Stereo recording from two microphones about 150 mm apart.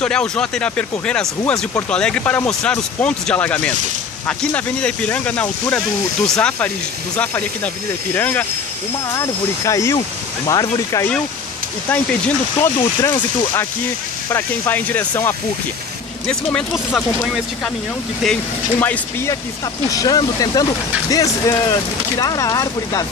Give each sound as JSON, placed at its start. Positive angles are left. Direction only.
{"t": 0.0, "sound": "speech", "side_deg": 5}
{"t": 13.1, "sound": "speech", "side_deg": 30}
{"t": 14.7, "sound": "speech", "side_deg": 10}
{"t": 16.7, "sound": "speech", "side_deg": -5}
{"t": 18.2, "sound": "speech", "side_deg": 10}